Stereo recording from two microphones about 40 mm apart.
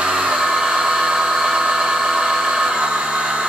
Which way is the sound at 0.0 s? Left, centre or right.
Right.